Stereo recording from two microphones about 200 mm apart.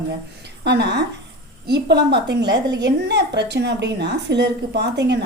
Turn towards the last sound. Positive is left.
turn(degrees=-55)  # may be behind; listen again after turning